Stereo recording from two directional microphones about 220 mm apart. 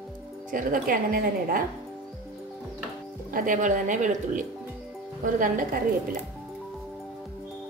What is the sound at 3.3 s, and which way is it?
A woman's voice, 35° right (ahead or behind).